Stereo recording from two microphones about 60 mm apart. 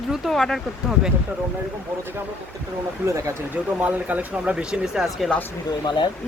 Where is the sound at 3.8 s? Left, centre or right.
Right.